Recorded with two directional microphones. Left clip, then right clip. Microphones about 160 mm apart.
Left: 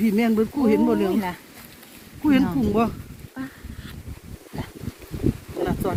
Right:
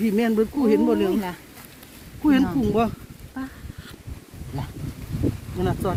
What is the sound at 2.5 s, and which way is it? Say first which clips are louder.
Speech: even; 20° right (ahead or behind).